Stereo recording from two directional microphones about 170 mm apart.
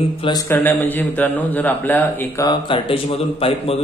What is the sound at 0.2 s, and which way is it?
Speech, 20° left (ahead or behind).